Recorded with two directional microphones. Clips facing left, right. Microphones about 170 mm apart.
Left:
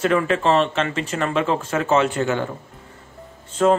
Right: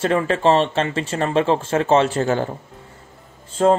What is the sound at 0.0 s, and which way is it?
Speech, 30° right (ahead or behind).